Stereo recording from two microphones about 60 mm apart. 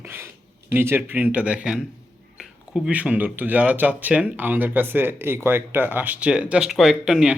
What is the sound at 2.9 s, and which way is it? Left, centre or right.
Speech, right.